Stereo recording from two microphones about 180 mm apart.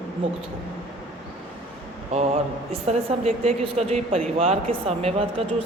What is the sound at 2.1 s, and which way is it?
Speech, 35° right (ahead or behind).